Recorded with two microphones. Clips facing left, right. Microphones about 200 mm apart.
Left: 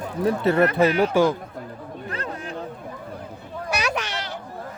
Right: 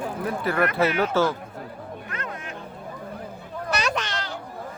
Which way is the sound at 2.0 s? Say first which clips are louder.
Left 6 dB; 35° left (ahead or behind).